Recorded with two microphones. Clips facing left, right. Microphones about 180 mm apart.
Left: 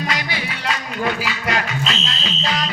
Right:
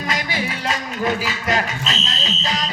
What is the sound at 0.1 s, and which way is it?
Music, 45° right (ahead or behind).